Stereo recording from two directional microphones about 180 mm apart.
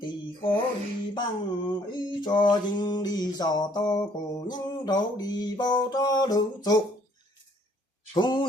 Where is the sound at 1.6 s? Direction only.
25° left (ahead or behind).